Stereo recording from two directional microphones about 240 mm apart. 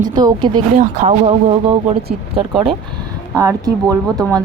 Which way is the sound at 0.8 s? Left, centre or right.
Right.